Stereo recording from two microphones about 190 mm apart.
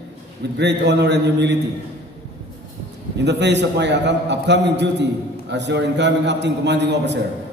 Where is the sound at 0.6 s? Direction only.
65° right (ahead or behind).